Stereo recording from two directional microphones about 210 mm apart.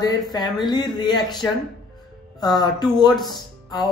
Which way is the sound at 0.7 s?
20° left (ahead or behind).